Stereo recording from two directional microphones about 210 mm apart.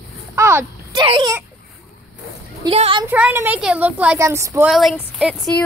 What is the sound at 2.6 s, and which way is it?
Speech, 25° right (ahead or behind).